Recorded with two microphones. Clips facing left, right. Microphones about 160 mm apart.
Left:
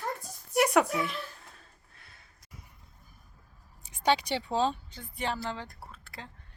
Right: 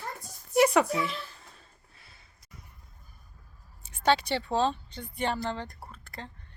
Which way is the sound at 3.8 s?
15° left (ahead or behind).